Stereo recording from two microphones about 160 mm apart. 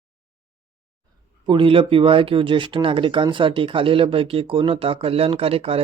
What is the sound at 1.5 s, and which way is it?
Speech, 30° right (ahead or behind).